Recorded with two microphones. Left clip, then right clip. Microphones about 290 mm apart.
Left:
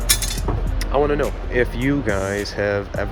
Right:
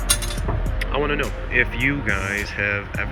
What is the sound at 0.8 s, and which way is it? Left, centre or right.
Speech, centre.